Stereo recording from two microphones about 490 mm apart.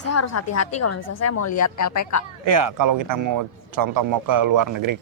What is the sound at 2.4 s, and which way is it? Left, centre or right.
A man's voice, right.